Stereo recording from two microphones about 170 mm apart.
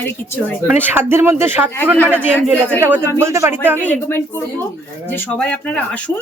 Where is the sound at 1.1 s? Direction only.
15° right (ahead or behind).